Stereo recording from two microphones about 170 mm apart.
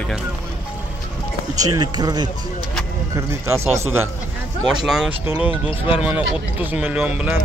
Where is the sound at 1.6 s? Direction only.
25° right (ahead or behind).